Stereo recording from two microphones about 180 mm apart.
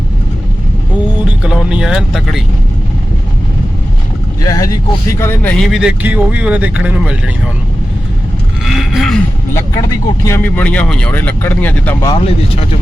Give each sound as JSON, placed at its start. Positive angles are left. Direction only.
{"t": 1.2, "sound": "speech", "side_deg": -5}
{"t": 4.4, "sound": "speech", "side_deg": 20}
{"t": 8.6, "sound": "a sound", "side_deg": 0}
{"t": 10.2, "sound": "speech", "side_deg": 10}
{"t": 12.0, "sound": "speech", "side_deg": 30}